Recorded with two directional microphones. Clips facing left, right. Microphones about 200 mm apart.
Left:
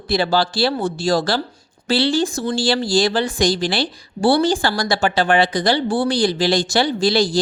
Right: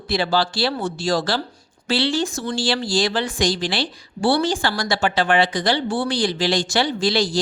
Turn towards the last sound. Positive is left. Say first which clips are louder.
# left 3 dB
turn(degrees=35)  # may be behind; listen again after turning